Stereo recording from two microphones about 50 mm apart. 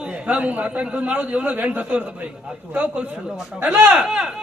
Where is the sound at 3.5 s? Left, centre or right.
Right.